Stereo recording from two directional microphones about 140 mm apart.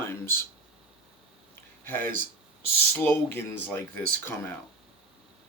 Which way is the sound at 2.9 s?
15° left (ahead or behind).